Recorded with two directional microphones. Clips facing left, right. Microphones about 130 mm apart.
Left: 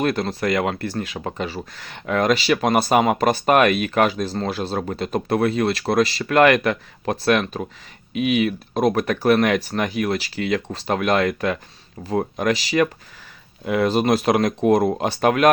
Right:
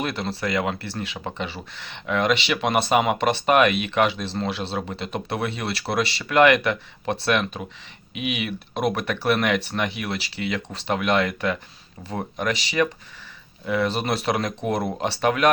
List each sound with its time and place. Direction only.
0.0 s speech: 45° left (ahead or behind)